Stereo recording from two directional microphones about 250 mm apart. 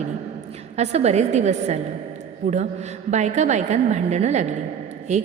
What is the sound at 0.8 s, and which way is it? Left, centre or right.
A woman's voice, right.